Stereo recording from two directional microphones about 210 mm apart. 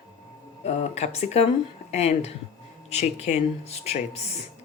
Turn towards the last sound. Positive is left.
turn(degrees=30)  # may be behind; listen again after turning